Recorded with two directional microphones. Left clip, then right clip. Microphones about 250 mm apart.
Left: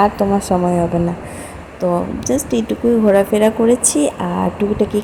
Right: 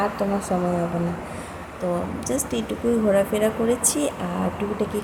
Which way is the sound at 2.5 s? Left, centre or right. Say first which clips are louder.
Left 8 dB; centre.